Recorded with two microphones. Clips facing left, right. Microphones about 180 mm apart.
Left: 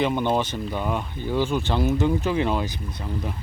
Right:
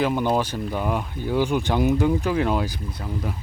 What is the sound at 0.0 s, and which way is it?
Speech, 5° right (ahead or behind).